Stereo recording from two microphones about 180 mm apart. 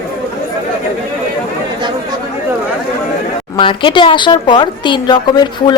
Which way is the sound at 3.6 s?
25° left (ahead or behind).